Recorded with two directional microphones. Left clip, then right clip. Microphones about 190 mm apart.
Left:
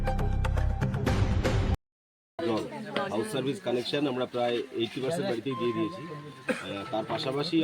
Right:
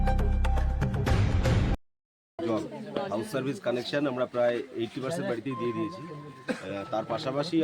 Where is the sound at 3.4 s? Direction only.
10° right (ahead or behind).